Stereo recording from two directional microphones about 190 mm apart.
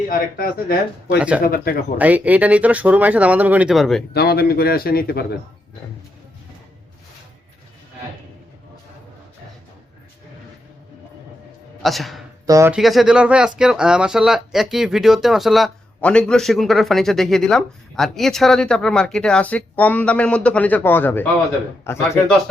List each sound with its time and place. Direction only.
0.1 s a man's voice: 50° left (ahead or behind)
2.0 s speech: 10° right (ahead or behind)
4.1 s a man's voice: 55° left (ahead or behind)
11.8 s speech: centre (ahead or behind)
12.5 s speech: 15° right (ahead or behind)
12.7 s speech: centre (ahead or behind)